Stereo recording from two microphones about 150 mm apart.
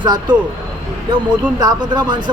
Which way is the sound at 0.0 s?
30° right (ahead or behind).